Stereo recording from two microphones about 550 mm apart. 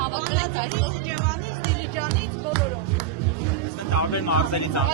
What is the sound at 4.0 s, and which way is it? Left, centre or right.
Speech, left.